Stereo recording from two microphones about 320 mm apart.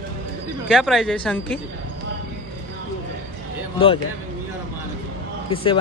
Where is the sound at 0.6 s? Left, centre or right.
Centre.